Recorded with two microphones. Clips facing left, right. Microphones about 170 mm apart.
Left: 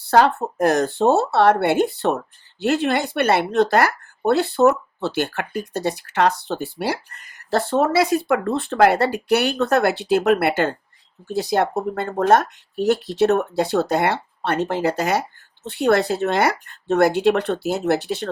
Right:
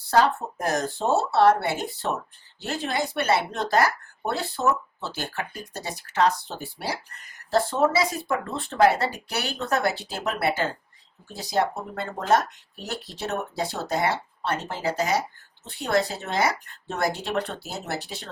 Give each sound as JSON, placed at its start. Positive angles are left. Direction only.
{"t": 0.1, "sound": "speech", "side_deg": 65}